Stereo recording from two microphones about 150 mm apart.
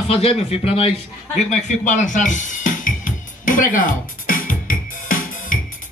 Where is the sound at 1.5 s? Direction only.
55° left (ahead or behind).